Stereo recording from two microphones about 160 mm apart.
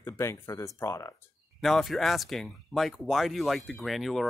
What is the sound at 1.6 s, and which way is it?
Speech, centre (ahead or behind).